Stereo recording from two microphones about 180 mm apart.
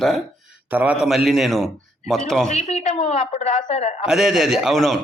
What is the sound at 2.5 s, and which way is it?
A woman's voice, 35° left (ahead or behind).